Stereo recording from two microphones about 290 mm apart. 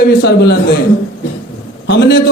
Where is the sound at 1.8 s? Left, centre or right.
Left.